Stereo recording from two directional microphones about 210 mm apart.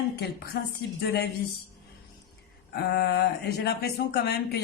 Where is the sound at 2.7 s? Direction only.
50° left (ahead or behind).